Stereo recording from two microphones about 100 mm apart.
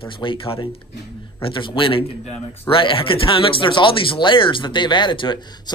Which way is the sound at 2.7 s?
60° left (ahead or behind).